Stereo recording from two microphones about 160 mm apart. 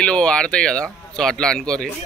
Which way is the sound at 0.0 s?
5° left (ahead or behind).